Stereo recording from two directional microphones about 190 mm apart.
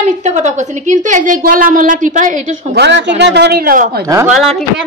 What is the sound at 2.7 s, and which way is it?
A man's voice, 65° right (ahead or behind).